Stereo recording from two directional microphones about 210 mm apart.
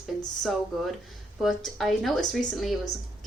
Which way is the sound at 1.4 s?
Centre (ahead or behind).